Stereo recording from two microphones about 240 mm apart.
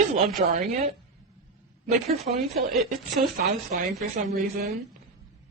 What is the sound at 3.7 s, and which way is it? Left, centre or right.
Speech, right.